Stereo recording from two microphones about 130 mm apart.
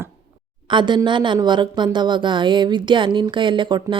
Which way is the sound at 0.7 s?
35° right (ahead or behind).